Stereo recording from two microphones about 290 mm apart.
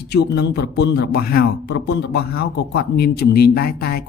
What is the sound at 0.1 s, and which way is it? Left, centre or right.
Speech, left.